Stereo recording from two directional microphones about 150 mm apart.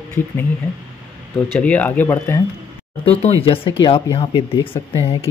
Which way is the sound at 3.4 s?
35° left (ahead or behind).